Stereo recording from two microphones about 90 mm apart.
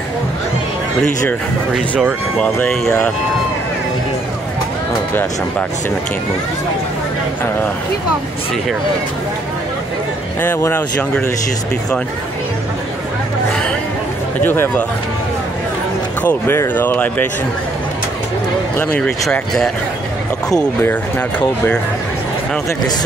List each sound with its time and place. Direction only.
10.4 s speech: 25° left (ahead or behind)
14.4 s speech: 25° left (ahead or behind)
16.2 s speech: 20° left (ahead or behind)
18.9 s speech: 10° left (ahead or behind)